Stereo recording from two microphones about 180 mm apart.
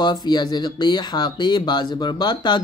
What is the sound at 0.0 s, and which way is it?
Speech, 25° left (ahead or behind).